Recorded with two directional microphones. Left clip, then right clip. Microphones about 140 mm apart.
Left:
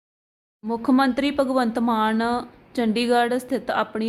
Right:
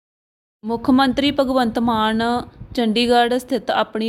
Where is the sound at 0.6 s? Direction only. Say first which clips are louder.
Right 3 dB; 35° right (ahead or behind).